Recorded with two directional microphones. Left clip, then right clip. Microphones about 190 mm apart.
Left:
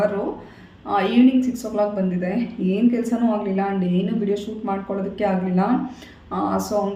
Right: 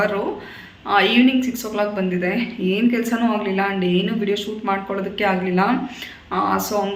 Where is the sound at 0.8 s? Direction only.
15° left (ahead or behind).